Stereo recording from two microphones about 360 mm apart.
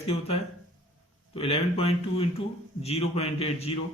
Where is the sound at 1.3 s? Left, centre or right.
Centre.